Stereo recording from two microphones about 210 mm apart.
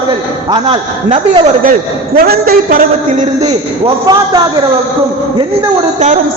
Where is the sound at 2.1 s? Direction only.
45° right (ahead or behind); by 4.4 s 20° right (ahead or behind).